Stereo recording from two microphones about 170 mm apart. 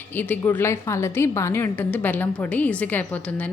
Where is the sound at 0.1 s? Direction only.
10° left (ahead or behind).